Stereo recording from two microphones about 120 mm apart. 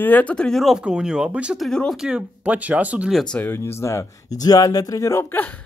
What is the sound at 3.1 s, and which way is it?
Speech, 5° left (ahead or behind).